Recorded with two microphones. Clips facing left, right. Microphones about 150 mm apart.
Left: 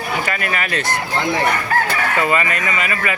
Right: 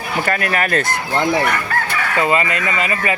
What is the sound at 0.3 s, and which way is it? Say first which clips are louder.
Speech: right 4 dB; 45° right (ahead or behind).